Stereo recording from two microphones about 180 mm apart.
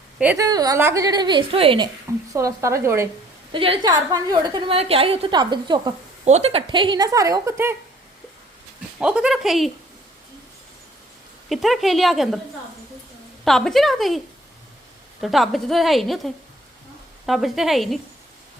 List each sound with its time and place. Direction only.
0.3 s a woman's voice: 20° right (ahead or behind)
2.3 s speech: 15° right (ahead or behind)
3.5 s a woman's voice: 30° right (ahead or behind)
6.2 s a woman's voice: 35° right (ahead or behind); by 7.8 s 15° right (ahead or behind)
9.0 s a woman's voice: 5° right (ahead or behind)
11.4 s a woman's voice: centre (ahead or behind)
13.4 s a woman's voice: centre (ahead or behind)
15.2 s a woman's voice: centre (ahead or behind)